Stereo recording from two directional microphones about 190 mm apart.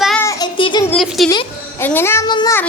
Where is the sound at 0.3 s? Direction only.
20° left (ahead or behind).